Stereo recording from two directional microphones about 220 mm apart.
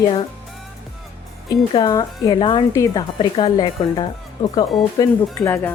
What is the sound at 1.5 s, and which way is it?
A woman's voice, 15° left (ahead or behind).